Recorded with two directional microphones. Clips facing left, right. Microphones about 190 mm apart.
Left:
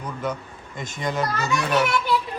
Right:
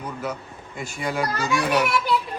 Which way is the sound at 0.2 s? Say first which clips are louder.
Left 2 dB; 10° right (ahead or behind).